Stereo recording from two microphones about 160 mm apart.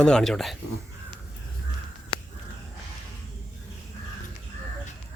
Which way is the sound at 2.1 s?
35° left (ahead or behind).